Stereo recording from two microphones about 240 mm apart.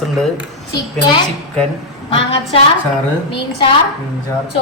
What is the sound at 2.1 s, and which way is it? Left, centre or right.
Speech, left.